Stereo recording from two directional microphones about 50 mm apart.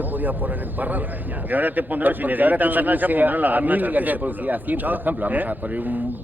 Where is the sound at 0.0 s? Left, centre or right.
Right.